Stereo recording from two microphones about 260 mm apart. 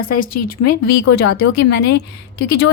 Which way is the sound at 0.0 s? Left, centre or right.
Left.